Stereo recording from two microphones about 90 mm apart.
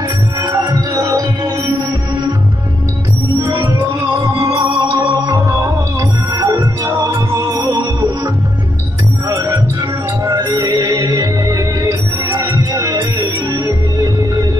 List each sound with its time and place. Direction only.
0.6 s heart sounds: 40° right (ahead or behind)
3.5 s music: 40° right (ahead or behind)
9.3 s music: 35° right (ahead or behind)